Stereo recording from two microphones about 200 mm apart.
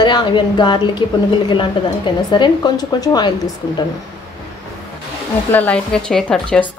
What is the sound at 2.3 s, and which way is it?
Speech, 20° left (ahead or behind).